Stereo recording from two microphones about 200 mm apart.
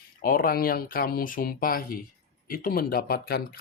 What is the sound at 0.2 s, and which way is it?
Speech, 45° left (ahead or behind).